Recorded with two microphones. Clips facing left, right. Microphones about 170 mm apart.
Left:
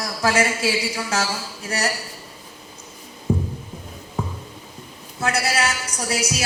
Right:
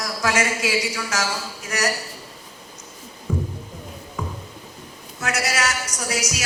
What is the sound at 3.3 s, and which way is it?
Music, 30° left (ahead or behind).